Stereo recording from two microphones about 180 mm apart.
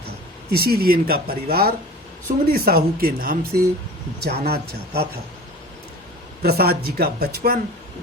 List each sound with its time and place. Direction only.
0.5 s speech: 60° right (ahead or behind)
6.4 s speech: 60° right (ahead or behind)